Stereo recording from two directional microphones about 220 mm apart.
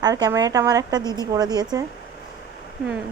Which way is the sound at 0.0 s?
15° right (ahead or behind).